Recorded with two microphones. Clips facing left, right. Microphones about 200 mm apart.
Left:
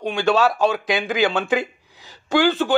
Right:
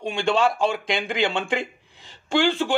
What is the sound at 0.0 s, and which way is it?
Speech, centre (ahead or behind).